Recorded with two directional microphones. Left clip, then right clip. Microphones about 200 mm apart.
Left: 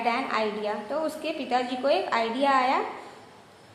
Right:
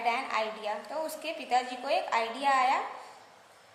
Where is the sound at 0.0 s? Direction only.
15° right (ahead or behind).